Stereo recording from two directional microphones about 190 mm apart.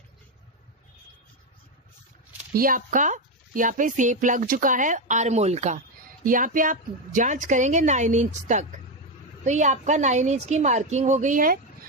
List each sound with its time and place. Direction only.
2.5 s speech: 50° right (ahead or behind)